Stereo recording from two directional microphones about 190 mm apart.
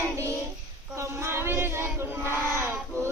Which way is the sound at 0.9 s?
15° right (ahead or behind).